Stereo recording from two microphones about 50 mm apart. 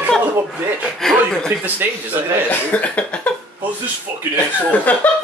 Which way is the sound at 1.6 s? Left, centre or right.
Right.